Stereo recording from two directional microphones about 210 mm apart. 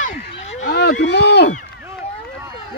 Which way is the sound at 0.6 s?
50° left (ahead or behind).